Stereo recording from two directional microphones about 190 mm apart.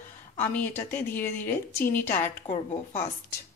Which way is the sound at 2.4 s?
30° left (ahead or behind).